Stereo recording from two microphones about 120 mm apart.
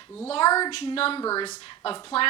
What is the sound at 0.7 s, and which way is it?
Speech, 50° left (ahead or behind).